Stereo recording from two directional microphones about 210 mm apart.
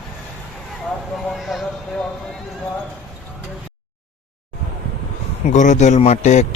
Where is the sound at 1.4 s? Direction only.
Centre (ahead or behind).